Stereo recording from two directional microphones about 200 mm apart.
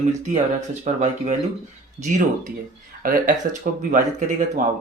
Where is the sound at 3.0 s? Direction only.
45° right (ahead or behind).